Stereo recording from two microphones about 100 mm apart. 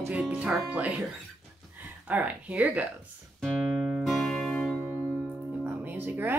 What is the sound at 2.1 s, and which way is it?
Speech, 15° right (ahead or behind).